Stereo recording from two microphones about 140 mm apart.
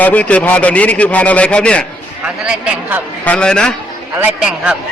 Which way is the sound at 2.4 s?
5° right (ahead or behind).